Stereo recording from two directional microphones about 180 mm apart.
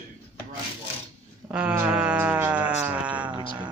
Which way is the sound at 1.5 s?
10° right (ahead or behind).